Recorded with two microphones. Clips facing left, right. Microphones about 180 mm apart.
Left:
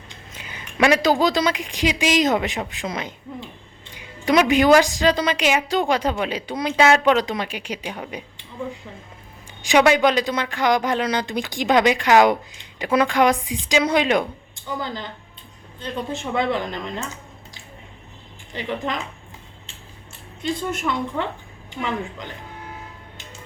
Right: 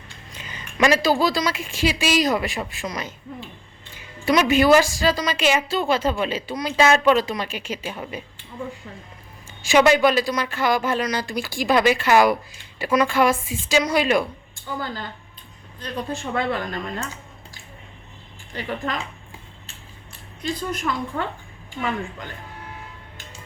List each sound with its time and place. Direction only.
0.3 s speech: 10° left (ahead or behind)
9.6 s speech: 15° left (ahead or behind)
20.4 s speech: 25° left (ahead or behind)